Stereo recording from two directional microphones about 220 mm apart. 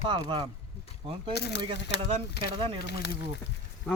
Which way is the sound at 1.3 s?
50° left (ahead or behind).